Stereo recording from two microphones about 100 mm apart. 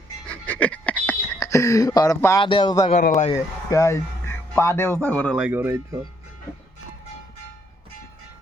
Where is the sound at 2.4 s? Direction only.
55° left (ahead or behind).